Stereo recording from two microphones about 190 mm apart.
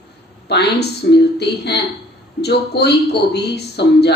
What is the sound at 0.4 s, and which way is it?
Speech, 60° left (ahead or behind).